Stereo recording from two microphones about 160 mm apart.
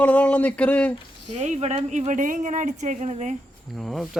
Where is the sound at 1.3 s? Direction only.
45° right (ahead or behind).